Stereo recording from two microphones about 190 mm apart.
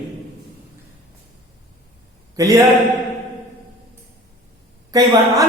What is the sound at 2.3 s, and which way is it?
Speech, 15° right (ahead or behind).